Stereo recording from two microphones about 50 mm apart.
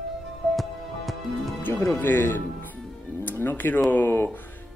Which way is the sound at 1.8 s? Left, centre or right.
Left.